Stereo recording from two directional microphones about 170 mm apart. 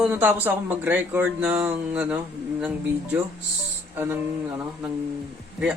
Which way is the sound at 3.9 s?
10° right (ahead or behind).